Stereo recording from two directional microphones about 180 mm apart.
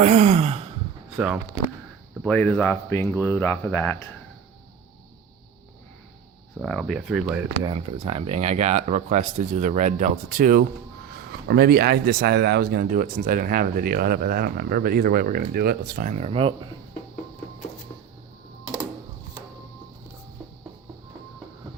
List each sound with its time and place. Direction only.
0.0 s speech: 40° right (ahead or behind)
2.2 s speech: 5° left (ahead or behind)
6.6 s speech: centre (ahead or behind)
7.7 s speech: 30° right (ahead or behind)